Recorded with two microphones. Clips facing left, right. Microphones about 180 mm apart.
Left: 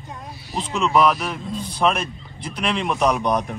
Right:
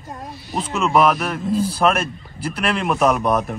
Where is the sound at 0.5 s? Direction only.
5° right (ahead or behind).